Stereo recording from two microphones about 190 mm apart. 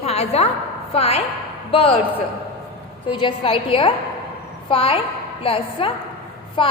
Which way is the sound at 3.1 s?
25° left (ahead or behind).